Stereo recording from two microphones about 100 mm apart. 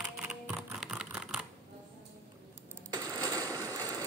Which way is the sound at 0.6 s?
5° right (ahead or behind).